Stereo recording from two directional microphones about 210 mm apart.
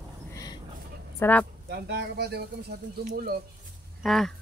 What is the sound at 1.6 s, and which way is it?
Speech, 50° right (ahead or behind).